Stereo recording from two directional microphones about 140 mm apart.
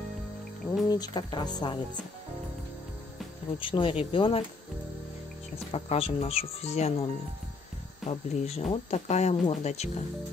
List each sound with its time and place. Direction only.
0.8 s speech: 25° left (ahead or behind)
3.5 s speech: 35° left (ahead or behind)
5.7 s speech: 45° left (ahead or behind)
8.1 s speech: 50° left (ahead or behind)